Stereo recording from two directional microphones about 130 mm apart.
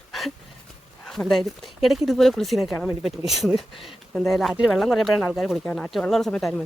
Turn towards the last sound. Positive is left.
turn(degrees=5)  # may be behind; listen again after turning